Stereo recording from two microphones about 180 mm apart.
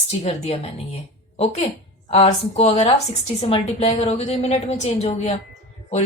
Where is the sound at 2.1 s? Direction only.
35° left (ahead or behind).